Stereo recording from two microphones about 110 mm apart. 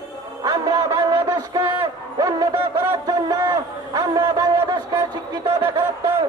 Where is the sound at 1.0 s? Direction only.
35° right (ahead or behind).